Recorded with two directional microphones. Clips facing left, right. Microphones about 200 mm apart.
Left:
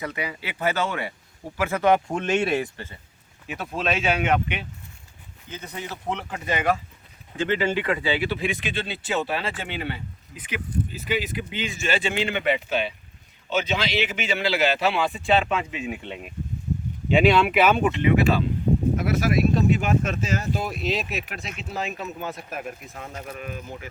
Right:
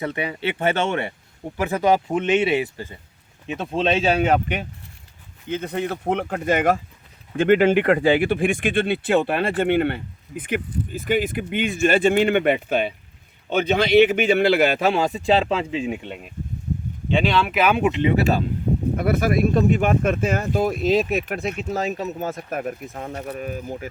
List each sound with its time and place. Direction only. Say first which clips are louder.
0.0 s speech: right 6 dB; 25° right (ahead or behind)
1.6 s speech: right 1 dB; 15° right (ahead or behind)
2.0 s speech: right 4 dB; 5° right (ahead or behind)
3.4 s speech: right 5 dB; 25° right (ahead or behind)
5.5 s speech: right 10 dB; 60° right (ahead or behind); by 16.0 s 30° right (ahead or behind)
17.1 s speech: left 2 dB; 5° left (ahead or behind)
17.8 s speech: right 2 dB; 20° right (ahead or behind)
18.1 s speech: even; 40° right (ahead or behind)
18.9 s speech: right 3 dB; 55° right (ahead or behind)
23.1 s speech: right 5 dB; 35° right (ahead or behind)